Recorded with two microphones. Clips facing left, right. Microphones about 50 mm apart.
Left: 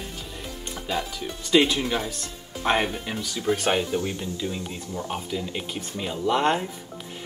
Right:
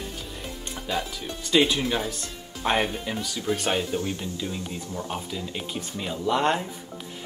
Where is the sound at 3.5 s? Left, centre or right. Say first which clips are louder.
Left 3 dB; left.